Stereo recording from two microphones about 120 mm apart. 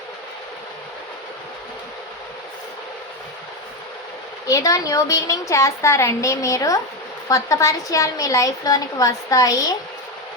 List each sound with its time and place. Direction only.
4.4 s a woman's voice: 30° left (ahead or behind)